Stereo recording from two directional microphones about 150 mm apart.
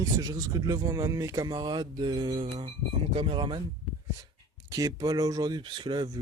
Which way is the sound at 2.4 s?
40° right (ahead or behind).